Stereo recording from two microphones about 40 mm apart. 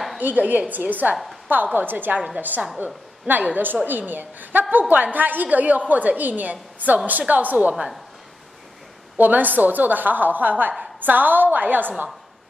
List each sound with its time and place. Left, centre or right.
0.2 s a woman's voice: right
9.2 s a woman's voice: right